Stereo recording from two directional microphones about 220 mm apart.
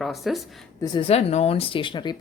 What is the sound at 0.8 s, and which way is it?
Speech, 25° left (ahead or behind).